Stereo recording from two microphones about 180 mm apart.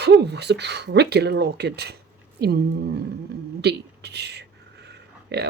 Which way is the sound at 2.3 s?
60° right (ahead or behind).